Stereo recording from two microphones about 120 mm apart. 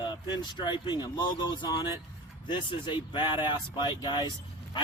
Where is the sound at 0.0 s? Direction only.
40° left (ahead or behind).